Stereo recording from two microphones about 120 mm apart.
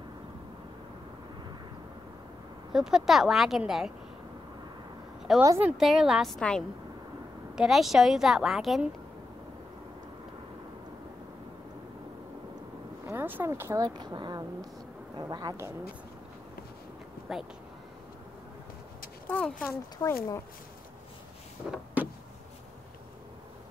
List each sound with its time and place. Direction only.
2.7 s a woman's voice: 5° right (ahead or behind)
5.3 s a woman's voice: centre (ahead or behind)
13.0 s speech: 15° right (ahead or behind); by 15.5 s 35° right (ahead or behind)
17.3 s a woman's voice: 5° right (ahead or behind)
19.2 s speech: 10° left (ahead or behind)
20.0 s speech: 25° left (ahead or behind)
21.6 s a sound: 10° right (ahead or behind)